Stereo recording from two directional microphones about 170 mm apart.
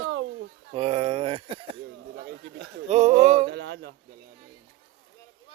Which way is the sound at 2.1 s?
90° right.